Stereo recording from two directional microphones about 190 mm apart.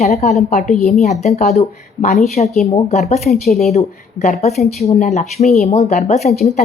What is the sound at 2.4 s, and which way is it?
Speech, 35° left (ahead or behind).